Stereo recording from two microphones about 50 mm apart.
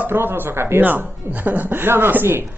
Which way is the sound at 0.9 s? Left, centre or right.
Right.